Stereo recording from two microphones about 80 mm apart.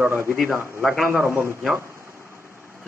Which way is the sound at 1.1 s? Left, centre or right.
Right.